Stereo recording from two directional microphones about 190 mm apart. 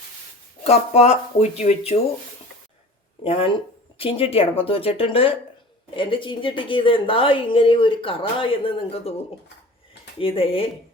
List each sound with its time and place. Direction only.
0.6 s speech: 35° left (ahead or behind)
3.2 s a woman's voice: 30° left (ahead or behind)
10.2 s a woman's voice: 30° left (ahead or behind)